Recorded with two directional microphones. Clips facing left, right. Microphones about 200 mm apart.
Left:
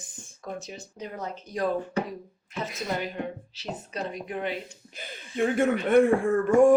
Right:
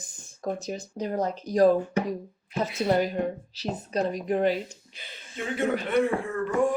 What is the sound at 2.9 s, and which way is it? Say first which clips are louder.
Speech: right 8 dB; 40° right (ahead or behind).